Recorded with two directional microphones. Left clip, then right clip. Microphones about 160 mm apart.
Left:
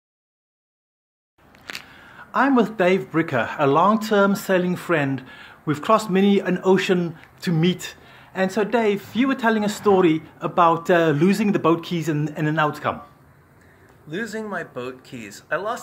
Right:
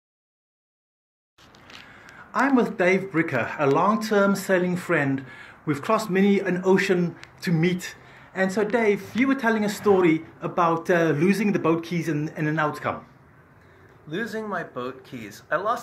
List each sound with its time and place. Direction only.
2.1 s speech: 15° left (ahead or behind)
14.0 s speech: 15° left (ahead or behind)